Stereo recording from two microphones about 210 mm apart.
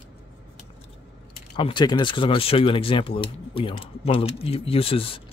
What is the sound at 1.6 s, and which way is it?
Speech, 25° left (ahead or behind).